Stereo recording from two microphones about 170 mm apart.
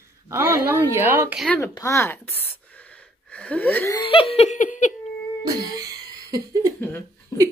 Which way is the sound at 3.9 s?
30° left (ahead or behind).